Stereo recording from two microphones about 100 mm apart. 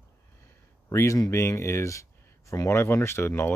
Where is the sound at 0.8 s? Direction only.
30° left (ahead or behind).